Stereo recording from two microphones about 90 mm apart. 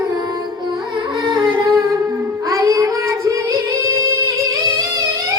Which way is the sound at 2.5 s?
40° right (ahead or behind).